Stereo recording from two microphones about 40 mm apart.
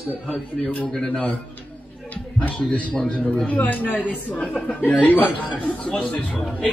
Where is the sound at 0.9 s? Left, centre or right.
Centre.